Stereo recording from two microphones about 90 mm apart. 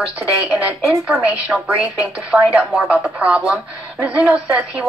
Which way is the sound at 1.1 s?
20° right (ahead or behind).